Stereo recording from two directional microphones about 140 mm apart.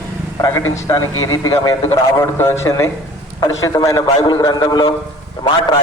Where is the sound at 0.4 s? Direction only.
25° left (ahead or behind).